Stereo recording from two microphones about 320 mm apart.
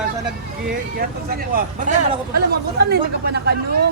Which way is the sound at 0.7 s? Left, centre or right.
Right.